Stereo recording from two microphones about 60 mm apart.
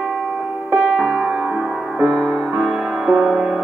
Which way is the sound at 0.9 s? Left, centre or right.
Centre.